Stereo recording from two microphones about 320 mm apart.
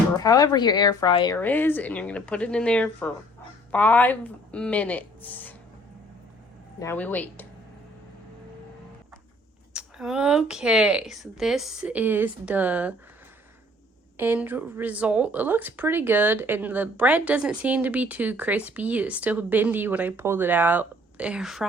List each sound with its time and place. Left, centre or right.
0.2 s speech: centre
6.7 s speech: centre
9.7 s speech: centre
14.2 s speech: centre